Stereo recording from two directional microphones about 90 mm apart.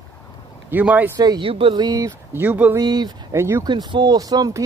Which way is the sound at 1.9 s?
45° right (ahead or behind).